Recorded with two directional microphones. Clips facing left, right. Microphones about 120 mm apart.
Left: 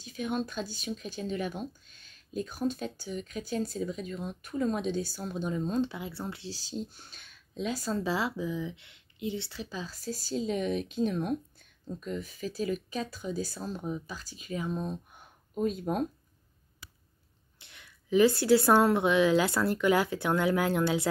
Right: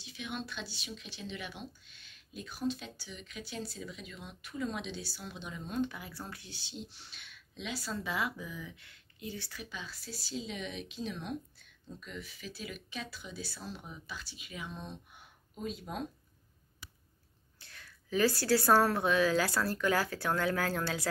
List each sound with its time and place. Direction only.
0.0 s speech: 45° left (ahead or behind)
17.6 s a woman's voice: 20° left (ahead or behind)